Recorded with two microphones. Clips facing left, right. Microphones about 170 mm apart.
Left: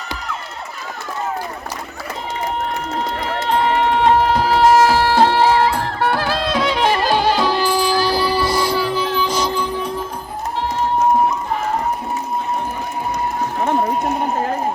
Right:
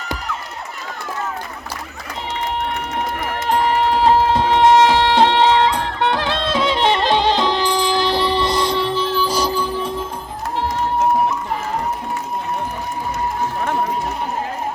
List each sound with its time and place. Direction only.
3.5 s music: 35° right (ahead or behind)
6.6 s music: centre (ahead or behind)
7.2 s music: 20° right (ahead or behind)
7.4 s music: 5° left (ahead or behind)
7.7 s music: 20° right (ahead or behind)
9.6 s music: centre (ahead or behind)